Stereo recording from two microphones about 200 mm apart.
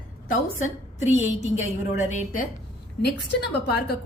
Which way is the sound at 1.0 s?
35° left (ahead or behind).